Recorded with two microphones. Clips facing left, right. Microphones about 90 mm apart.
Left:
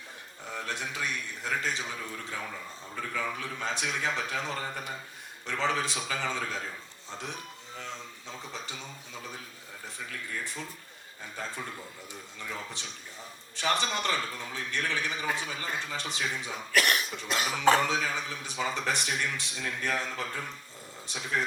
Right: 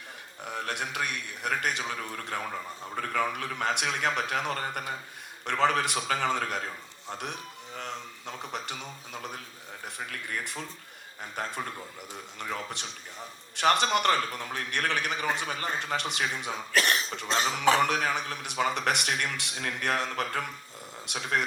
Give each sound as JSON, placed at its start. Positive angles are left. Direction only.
{"t": 0.4, "sound": "a man's voice", "side_deg": -65}
{"t": 7.8, "sound": "a sound", "side_deg": -60}
{"t": 8.5, "sound": "a man's voice", "side_deg": -65}
{"t": 16.7, "sound": "cough", "side_deg": -30}
{"t": 17.2, "sound": "speech", "side_deg": -30}
{"t": 17.8, "sound": "a man's voice", "side_deg": -65}